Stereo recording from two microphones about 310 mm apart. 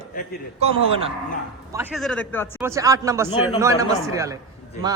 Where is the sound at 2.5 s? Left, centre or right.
Centre.